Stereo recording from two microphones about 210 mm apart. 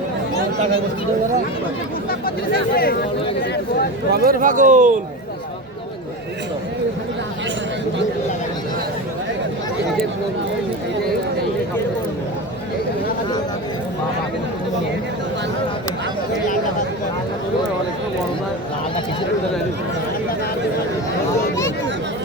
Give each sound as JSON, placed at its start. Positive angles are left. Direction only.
{"t": 2.0, "sound": "speech", "side_deg": 45}
{"t": 4.1, "sound": "speech", "side_deg": -45}